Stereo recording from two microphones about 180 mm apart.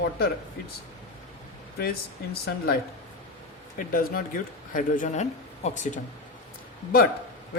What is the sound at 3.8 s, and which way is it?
Speech, 50° left (ahead or behind).